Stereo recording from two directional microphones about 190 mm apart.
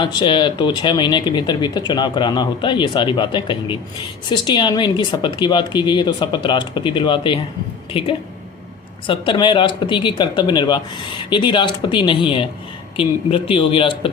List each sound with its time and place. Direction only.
0.0 s a woman's voice: 25° left (ahead or behind)
9.0 s a woman's voice: 25° left (ahead or behind)